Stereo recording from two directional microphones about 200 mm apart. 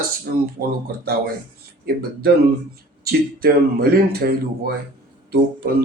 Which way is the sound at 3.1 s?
50° right (ahead or behind).